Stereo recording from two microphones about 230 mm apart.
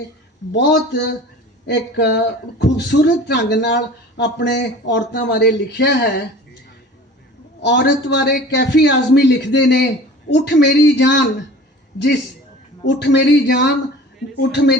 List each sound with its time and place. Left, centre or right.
0.5 s speech: left
7.6 s speech: left